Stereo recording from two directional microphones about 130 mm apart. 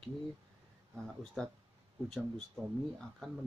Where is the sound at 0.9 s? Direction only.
5° left (ahead or behind).